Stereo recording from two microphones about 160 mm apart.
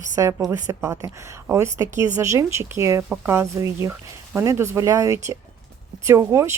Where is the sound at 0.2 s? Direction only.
20° right (ahead or behind).